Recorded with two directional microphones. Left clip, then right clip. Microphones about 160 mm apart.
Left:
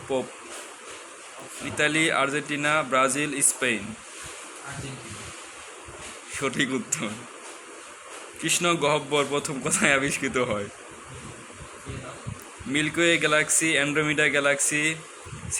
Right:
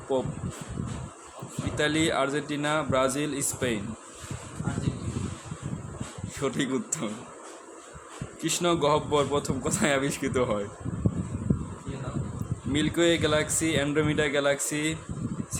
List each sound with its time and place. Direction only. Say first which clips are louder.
0.1 s a man's voice: even; 15° right (ahead or behind)
1.7 s a man's voice: left 3 dB; 15° right (ahead or behind)
6.3 s a man's voice: left 3 dB; 15° right (ahead or behind)
8.4 s a man's voice: left 2 dB; 15° right (ahead or behind)
12.7 s a man's voice: left 2 dB; 15° right (ahead or behind)